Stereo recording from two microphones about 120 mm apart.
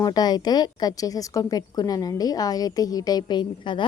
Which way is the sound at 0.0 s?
35° left (ahead or behind).